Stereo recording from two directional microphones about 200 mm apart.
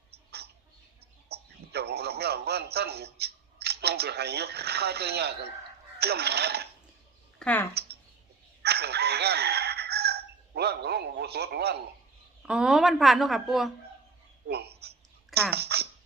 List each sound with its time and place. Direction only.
1.3 s speech: 55° right (ahead or behind)
7.3 s speech: 10° left (ahead or behind)
8.6 s chicken: 55° right (ahead or behind)
12.4 s a woman's voice: 5° right (ahead or behind)
14.4 s a sound: 55° right (ahead or behind)